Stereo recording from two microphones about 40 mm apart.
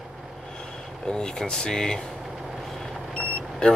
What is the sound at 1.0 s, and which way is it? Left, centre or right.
Speech, centre.